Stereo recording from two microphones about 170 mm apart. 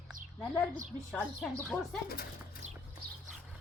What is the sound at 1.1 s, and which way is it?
Speech, 5° left (ahead or behind).